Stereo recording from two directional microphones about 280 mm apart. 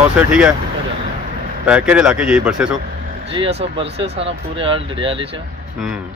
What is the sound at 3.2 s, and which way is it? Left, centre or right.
Speech, right.